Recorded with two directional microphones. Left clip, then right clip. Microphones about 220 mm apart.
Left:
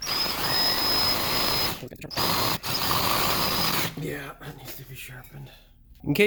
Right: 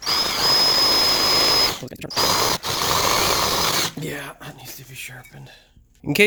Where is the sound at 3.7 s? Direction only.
45° right (ahead or behind).